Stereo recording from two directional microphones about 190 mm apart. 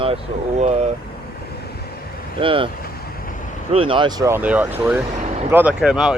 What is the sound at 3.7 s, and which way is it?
Speech, 30° right (ahead or behind).